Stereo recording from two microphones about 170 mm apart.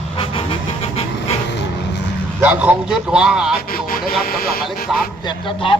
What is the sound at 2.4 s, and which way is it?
A man's voice, 10° right (ahead or behind).